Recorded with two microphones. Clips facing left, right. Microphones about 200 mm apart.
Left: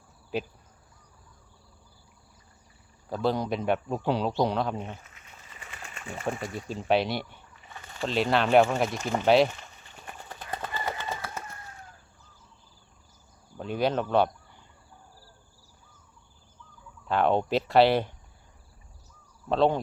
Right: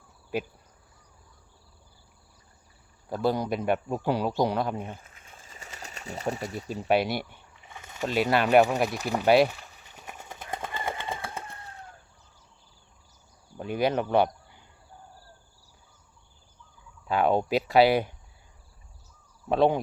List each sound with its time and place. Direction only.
3.1 s speech: 5° right (ahead or behind)
5.5 s pigeon: 40° right (ahead or behind)
6.3 s speech: 5° right (ahead or behind)
8.8 s a sound: 5° right (ahead or behind)
10.4 s a sound: 25° right (ahead or behind)
13.6 s speech: 10° right (ahead or behind)
17.1 s speech: 5° right (ahead or behind)
19.5 s speech: 10° right (ahead or behind)